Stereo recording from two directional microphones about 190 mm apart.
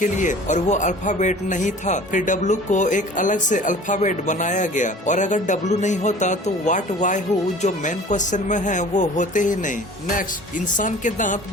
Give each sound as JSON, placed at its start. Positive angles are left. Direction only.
{"t": 0.0, "sound": "speech", "side_deg": 40}
{"t": 10.8, "sound": "speech", "side_deg": 40}